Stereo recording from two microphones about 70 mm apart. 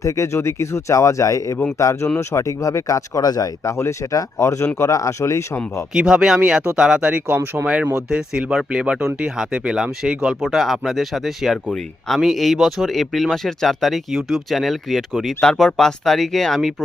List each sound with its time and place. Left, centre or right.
0.0 s speech: left
5.9 s speech: centre
7.3 s speech: right
7.9 s speech: centre